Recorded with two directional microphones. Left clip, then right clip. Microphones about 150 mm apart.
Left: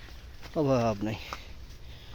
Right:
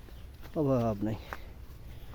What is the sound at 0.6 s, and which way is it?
Speech, 10° right (ahead or behind).